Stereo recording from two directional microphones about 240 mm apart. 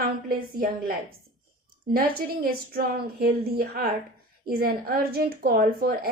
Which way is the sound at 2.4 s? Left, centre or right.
Right.